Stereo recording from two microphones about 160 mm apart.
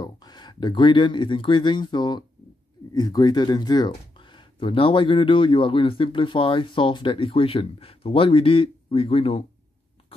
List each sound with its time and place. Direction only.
0.0 s speech: 25° left (ahead or behind)